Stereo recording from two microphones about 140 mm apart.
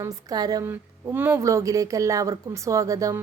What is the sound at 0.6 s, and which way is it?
A woman's voice, 15° right (ahead or behind).